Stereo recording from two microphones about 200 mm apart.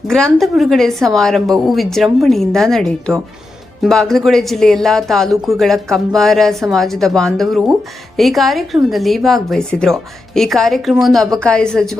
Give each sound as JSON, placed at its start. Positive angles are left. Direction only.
{"t": 0.1, "sound": "speech", "side_deg": 0}